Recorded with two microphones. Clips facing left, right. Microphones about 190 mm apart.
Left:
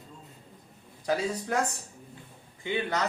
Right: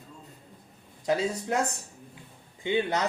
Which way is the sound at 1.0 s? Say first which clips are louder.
Right 2 dB; 20° right (ahead or behind).